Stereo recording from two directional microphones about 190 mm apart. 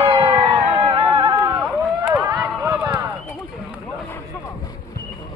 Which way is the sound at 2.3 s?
10° right (ahead or behind).